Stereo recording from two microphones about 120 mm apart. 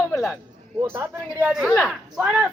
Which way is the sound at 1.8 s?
15° right (ahead or behind).